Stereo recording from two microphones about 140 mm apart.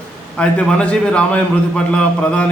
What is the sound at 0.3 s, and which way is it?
A man's voice, 10° left (ahead or behind).